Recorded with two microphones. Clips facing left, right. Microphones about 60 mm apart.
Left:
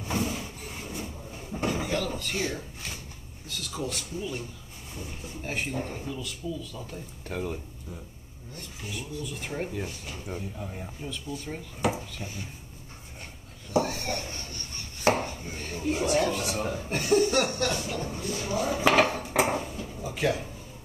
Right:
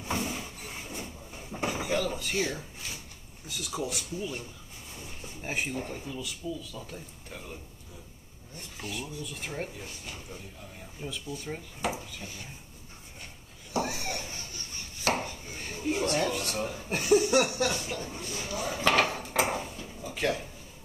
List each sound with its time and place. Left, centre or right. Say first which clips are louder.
0.1 s a sound: left 2 dB; centre
3.4 s speech: even; centre
7.2 s speech: left 13 dB; left
8.8 s speech: left 1 dB; centre
10.6 s speech: left 8 dB; left
11.0 s speech: right 1 dB; centre
13.7 s a sound: left 4 dB; centre
15.1 s chopping: left 5 dB; left
15.5 s speech: left 1 dB; centre
17.9 s speech: left 5 dB; centre
18.5 s speech: left 6 dB; left
18.8 s dishes: left 3 dB; centre
20.2 s speech: left 2 dB; centre